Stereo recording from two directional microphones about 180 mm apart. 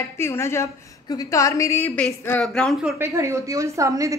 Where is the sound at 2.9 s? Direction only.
15° right (ahead or behind).